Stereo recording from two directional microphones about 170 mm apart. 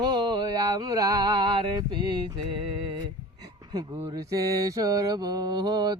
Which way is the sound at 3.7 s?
25° right (ahead or behind).